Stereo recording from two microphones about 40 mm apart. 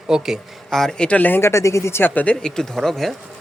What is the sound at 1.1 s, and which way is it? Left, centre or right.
Speech, left.